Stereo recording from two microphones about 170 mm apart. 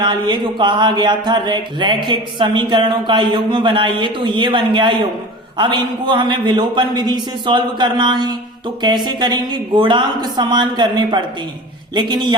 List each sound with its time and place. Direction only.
0.0 s a man's voice: 25° right (ahead or behind)